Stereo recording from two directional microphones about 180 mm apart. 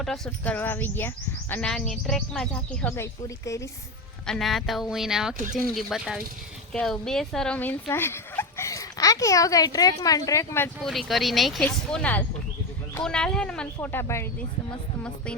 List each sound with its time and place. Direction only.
0.0 s speech: 5° left (ahead or behind)
4.3 s speech: centre (ahead or behind)
10.8 s speech: centre (ahead or behind)